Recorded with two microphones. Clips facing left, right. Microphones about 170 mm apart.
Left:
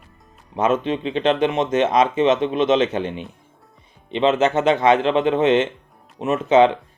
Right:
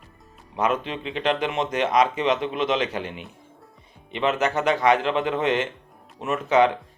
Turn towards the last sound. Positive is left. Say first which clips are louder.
# left 5 dB
turn(degrees=20)  # may be behind; listen again after turning